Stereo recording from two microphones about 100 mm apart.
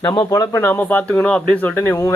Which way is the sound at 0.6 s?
20° left (ahead or behind).